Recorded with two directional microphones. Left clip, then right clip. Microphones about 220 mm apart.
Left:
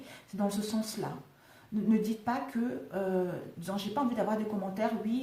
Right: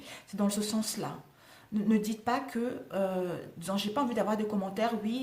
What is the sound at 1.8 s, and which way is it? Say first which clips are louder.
A woman's voice: right 1 dB; 45° right (ahead or behind).